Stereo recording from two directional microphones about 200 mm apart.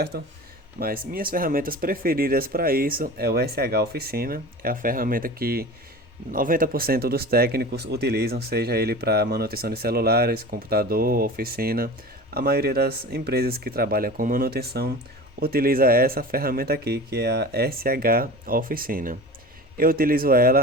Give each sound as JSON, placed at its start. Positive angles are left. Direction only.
{"t": 0.1, "sound": "speech", "side_deg": -50}